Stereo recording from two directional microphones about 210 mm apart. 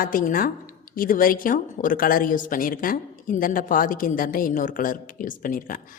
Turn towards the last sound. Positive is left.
turn(degrees=40)  # may be behind; listen again after turning